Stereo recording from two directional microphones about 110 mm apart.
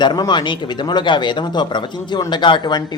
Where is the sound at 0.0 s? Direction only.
40° left (ahead or behind).